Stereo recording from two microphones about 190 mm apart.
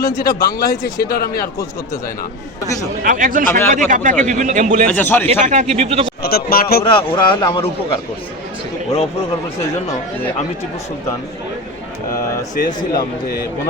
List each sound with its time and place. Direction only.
0.0 s speech: 20° left (ahead or behind)
1.1 s speech: 50° left (ahead or behind)
3.0 s speech: 45° right (ahead or behind)
4.9 s a man's voice: 10° left (ahead or behind)
5.3 s speech: 35° right (ahead or behind)
6.2 s speech: 55° left (ahead or behind)
6.9 s speech: 25° left (ahead or behind)
12.5 s speech: 45° left (ahead or behind)